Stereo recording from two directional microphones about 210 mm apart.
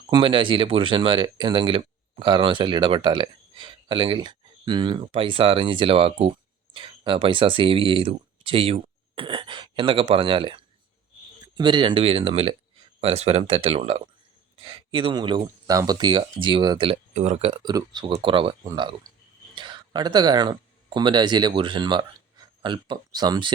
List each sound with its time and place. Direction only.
0.1 s speech: 25° right (ahead or behind)